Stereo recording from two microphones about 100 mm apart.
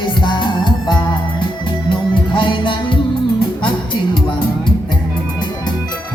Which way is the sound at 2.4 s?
55° left (ahead or behind).